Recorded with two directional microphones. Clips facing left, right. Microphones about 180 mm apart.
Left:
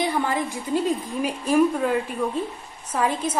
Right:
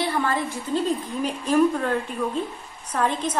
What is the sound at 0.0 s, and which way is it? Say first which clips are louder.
A woman's voice: left 1 dB; 15° left (ahead or behind).